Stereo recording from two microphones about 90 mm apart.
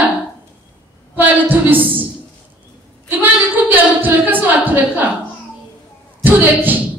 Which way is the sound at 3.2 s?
20° right (ahead or behind).